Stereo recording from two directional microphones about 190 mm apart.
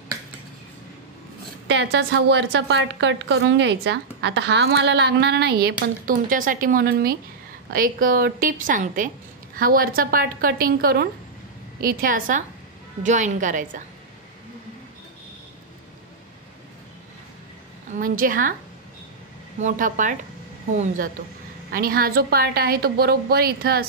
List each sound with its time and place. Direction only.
1.7 s a woman's voice: 70° right (ahead or behind); by 13.8 s 40° right (ahead or behind)
17.9 s a woman's voice: 45° right (ahead or behind)
19.6 s a woman's voice: 40° right (ahead or behind)